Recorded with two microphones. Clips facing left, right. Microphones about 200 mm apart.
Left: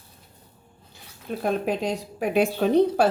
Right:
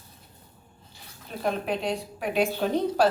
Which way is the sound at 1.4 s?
45° left (ahead or behind).